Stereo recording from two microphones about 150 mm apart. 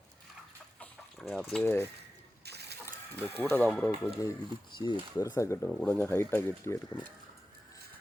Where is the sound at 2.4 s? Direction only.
90° right.